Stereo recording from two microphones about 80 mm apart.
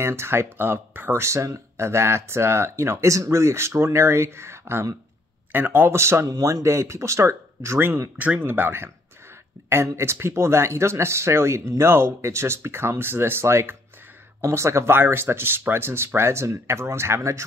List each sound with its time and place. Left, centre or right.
0.0 s speech: right